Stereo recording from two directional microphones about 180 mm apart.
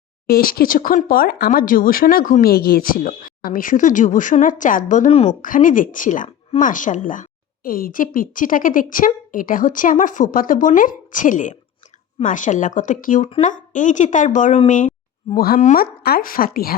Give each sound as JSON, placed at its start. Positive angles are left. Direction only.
{"t": 0.3, "sound": "speech", "side_deg": 55}
{"t": 15.4, "sound": "speech", "side_deg": 55}